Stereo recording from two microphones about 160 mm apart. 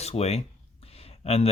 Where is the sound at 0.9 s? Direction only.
40° left (ahead or behind).